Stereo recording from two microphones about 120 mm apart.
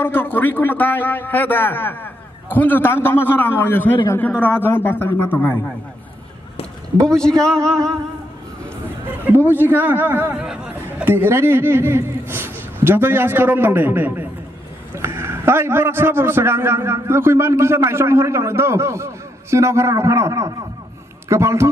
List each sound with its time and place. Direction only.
0.0 s a man's voice: 20° left (ahead or behind)
7.1 s speech: 5° left (ahead or behind)
9.2 s a man's voice: 15° right (ahead or behind)
11.1 s a man's voice: 20° right (ahead or behind)